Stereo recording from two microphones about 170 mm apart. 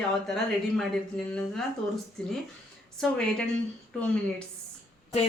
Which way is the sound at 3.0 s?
5° left (ahead or behind).